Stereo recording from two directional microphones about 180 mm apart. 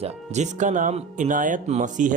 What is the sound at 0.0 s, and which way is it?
Speech, 40° right (ahead or behind).